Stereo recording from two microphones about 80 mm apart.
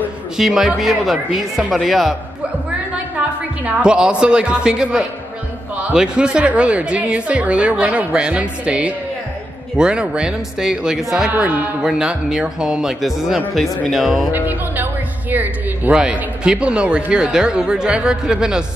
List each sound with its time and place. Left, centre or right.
0.4 s speech: centre
3.6 s a woman's voice: centre
11.3 s a man's voice: right
11.8 s a woman's voice: centre
14.3 s music: right
15.3 s a sound: right
16.0 s a woman's voice: centre